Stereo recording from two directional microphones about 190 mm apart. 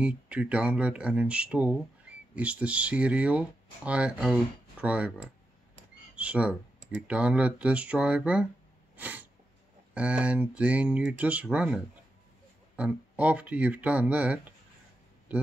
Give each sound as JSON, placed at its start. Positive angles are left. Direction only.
{"t": 0.0, "sound": "speech", "side_deg": -5}
{"t": 8.9, "sound": "sneeze", "side_deg": -10}
{"t": 9.9, "sound": "speech", "side_deg": -5}